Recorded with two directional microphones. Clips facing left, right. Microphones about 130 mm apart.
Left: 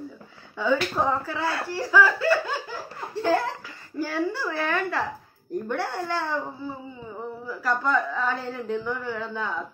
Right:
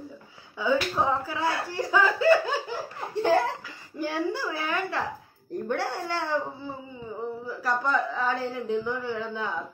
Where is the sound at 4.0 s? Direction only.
15° right (ahead or behind).